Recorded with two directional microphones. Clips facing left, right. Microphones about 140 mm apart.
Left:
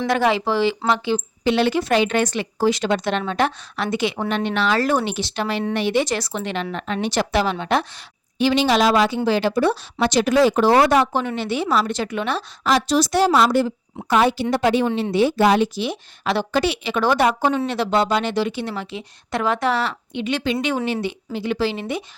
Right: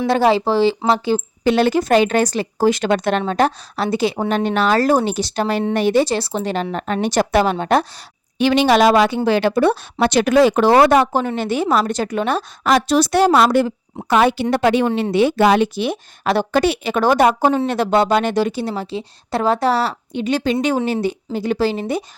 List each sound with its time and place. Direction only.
0.1 s a woman's voice: 30° right (ahead or behind)
8.4 s a woman's voice: 60° right (ahead or behind); by 22.0 s 40° right (ahead or behind)